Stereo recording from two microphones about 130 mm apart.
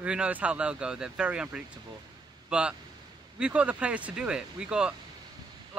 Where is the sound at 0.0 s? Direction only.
10° right (ahead or behind).